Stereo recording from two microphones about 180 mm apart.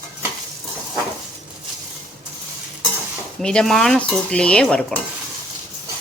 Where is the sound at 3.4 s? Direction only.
5° left (ahead or behind).